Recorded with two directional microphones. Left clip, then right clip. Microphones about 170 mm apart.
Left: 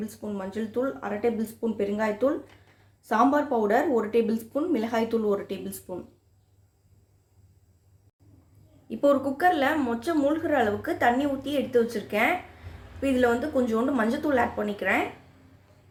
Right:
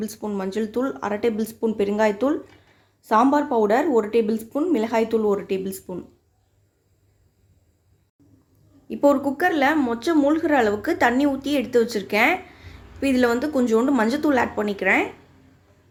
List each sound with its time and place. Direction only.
0.0 s a woman's voice: 40° right (ahead or behind)
8.9 s a woman's voice: 30° right (ahead or behind)